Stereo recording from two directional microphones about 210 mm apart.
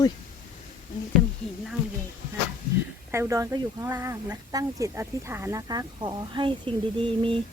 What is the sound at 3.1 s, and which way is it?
Speech, 15° right (ahead or behind).